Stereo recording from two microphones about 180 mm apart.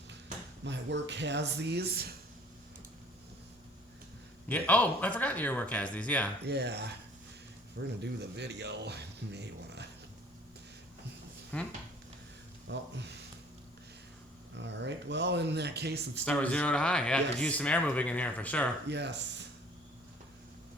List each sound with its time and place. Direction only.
0.6 s speech: 75° right (ahead or behind)
4.4 s speech: 10° left (ahead or behind)
6.4 s speech: 65° right (ahead or behind)
11.5 s speech: 10° left (ahead or behind)
12.6 s speech: 75° right (ahead or behind)
14.5 s speech: 75° right (ahead or behind)
16.2 s a man's voice: 5° left (ahead or behind)
18.9 s speech: 70° right (ahead or behind)